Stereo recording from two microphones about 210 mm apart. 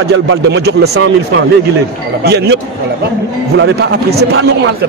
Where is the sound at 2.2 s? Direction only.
50° right (ahead or behind).